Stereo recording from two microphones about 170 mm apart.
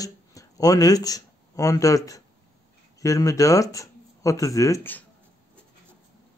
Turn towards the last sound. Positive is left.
turn(degrees=15)  # may be behind; listen again after turning